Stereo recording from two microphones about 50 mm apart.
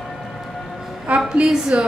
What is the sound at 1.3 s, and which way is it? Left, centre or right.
Speech, centre.